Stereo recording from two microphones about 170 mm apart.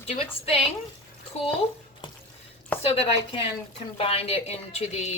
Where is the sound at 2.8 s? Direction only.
35° left (ahead or behind).